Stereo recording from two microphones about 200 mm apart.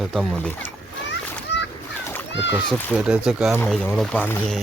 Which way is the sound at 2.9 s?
5° right (ahead or behind).